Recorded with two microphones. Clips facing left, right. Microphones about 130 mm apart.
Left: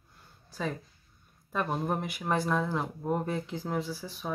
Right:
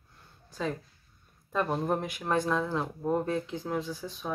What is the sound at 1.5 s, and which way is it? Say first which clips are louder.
Speech: right 2 dB; 5° left (ahead or behind).